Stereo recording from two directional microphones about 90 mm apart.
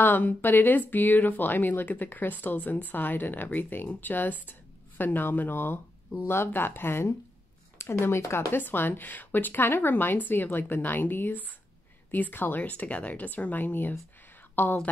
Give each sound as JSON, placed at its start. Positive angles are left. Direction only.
{"t": 0.0, "sound": "speech", "side_deg": 20}